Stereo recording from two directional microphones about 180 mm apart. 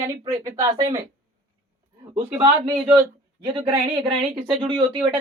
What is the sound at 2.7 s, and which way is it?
A woman's voice, 25° right (ahead or behind).